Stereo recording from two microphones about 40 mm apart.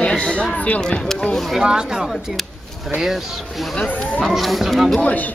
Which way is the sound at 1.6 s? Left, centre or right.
Centre.